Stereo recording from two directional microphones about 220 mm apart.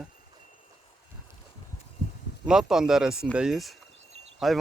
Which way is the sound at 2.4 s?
Centre (ahead or behind).